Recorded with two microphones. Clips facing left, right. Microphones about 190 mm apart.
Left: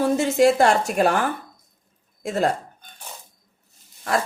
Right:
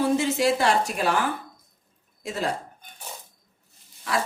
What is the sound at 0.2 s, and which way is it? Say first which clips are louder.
A woman's voice: left 6 dB; 50° left (ahead or behind).